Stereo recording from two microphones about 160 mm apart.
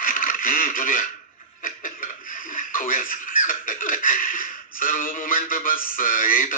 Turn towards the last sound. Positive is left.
turn(degrees=55)  # may be behind; listen again after turning